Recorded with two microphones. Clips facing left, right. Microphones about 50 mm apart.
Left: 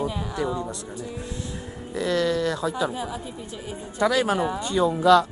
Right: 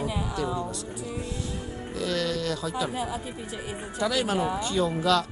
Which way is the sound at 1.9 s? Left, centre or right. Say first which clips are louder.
Left 5 dB; left.